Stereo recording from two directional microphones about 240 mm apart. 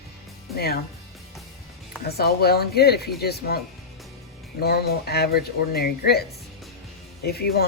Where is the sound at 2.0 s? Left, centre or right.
Left.